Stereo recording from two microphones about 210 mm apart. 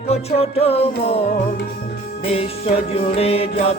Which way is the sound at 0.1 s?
30° left (ahead or behind).